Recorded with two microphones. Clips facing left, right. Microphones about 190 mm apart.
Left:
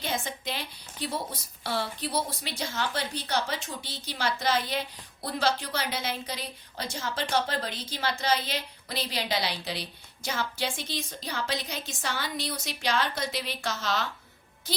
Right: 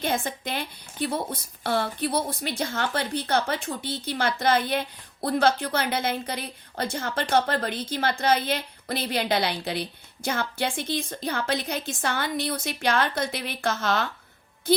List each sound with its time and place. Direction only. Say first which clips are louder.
0.0 s a woman's voice: right 5 dB; 55° right (ahead or behind)